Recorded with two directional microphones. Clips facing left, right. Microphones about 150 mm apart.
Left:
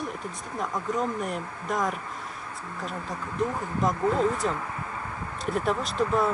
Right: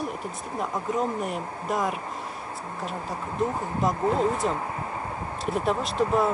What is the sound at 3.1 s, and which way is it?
Speech, 30° right (ahead or behind).